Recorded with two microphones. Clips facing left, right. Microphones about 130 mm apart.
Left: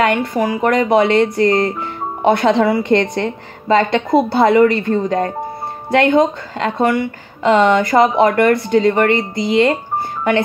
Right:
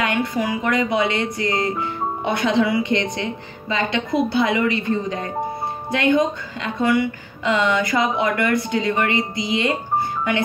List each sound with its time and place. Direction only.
0.0 s a woman's voice: 50° left (ahead or behind)
0.6 s a woman's voice: 60° left (ahead or behind); by 9.8 s 45° left (ahead or behind)